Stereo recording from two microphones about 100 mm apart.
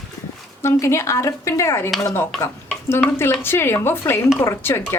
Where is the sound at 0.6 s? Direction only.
30° left (ahead or behind).